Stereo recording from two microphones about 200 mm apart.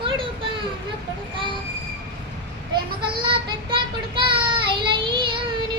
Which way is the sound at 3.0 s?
25° right (ahead or behind).